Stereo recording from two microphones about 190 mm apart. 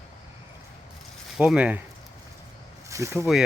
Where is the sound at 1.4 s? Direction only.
5° right (ahead or behind).